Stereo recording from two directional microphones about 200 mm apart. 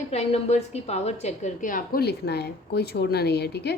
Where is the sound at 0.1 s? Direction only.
30° left (ahead or behind).